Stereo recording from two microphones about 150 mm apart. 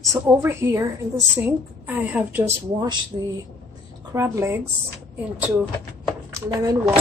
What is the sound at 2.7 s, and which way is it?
Speech, 25° right (ahead or behind).